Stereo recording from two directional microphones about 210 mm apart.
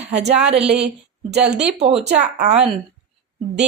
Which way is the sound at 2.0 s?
35° right (ahead or behind).